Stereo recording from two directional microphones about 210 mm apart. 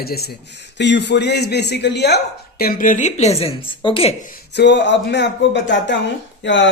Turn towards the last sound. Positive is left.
turn(degrees=60)  # may be behind; listen again after turning